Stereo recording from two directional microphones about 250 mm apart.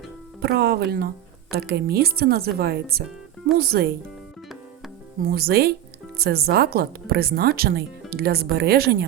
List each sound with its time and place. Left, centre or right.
0.4 s a woman's voice: right
5.2 s a woman's voice: right